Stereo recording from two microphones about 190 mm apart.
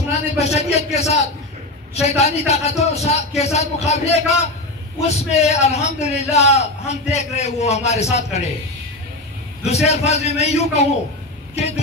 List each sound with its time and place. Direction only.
0.4 s a man's voice: 35° left (ahead or behind)
9.6 s a man's voice: 35° left (ahead or behind)